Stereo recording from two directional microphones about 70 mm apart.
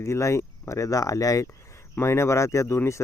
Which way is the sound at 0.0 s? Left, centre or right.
Left.